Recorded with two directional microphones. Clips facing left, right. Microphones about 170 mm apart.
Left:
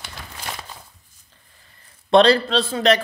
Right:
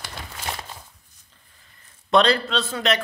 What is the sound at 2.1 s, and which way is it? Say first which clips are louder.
Speech: left 5 dB; 30° left (ahead or behind).